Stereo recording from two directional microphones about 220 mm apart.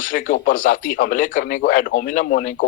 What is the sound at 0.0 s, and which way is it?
Speech, 40° left (ahead or behind).